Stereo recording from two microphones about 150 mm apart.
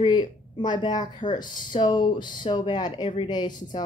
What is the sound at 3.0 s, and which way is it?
Speech, 50° left (ahead or behind).